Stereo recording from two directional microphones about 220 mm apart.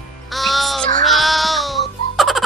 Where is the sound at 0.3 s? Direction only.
Centre (ahead or behind).